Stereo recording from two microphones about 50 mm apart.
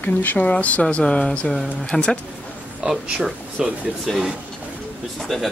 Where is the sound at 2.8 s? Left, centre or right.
Centre.